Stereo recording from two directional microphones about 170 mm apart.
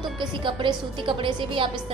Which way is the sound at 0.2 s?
30° right (ahead or behind).